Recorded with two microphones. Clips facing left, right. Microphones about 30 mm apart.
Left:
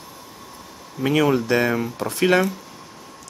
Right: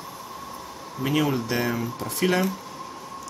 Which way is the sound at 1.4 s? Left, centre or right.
Left.